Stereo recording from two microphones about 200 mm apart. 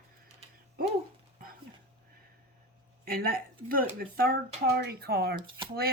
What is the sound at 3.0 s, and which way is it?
Speech, 45° right (ahead or behind).